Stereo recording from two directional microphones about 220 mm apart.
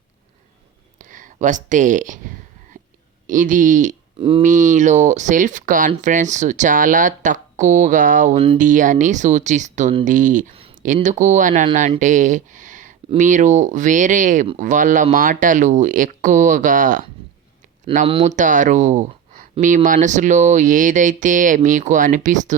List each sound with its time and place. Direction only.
0.9 s speech: 35° right (ahead or behind)
2.8 s whispering: 35° right (ahead or behind)
3.2 s speech: 35° right (ahead or behind)
4.2 s speech: 25° right (ahead or behind)